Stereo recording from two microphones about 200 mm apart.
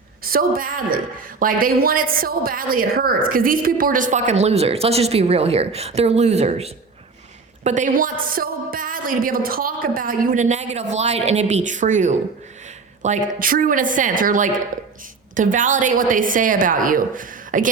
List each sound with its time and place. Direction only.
0.3 s a woman's voice: 45° right (ahead or behind)